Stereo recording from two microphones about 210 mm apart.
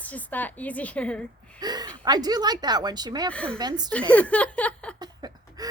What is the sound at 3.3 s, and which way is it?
Speech, 5° left (ahead or behind).